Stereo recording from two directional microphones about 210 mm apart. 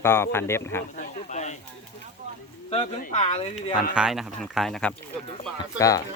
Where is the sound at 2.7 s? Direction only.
25° left (ahead or behind).